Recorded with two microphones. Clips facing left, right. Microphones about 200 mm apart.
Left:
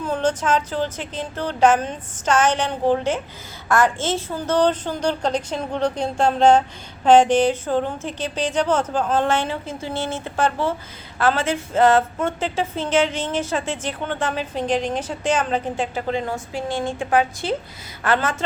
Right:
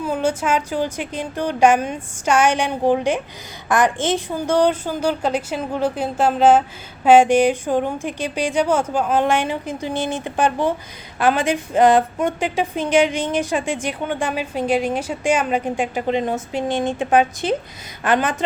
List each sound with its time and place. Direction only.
0.0 s speech: 10° right (ahead or behind)